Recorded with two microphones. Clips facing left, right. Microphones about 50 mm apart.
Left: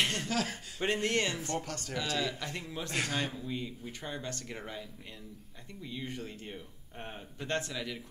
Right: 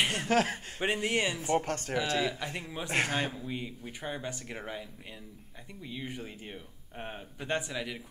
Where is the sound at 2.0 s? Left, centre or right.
Right.